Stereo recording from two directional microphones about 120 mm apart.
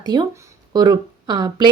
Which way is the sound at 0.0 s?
35° right (ahead or behind).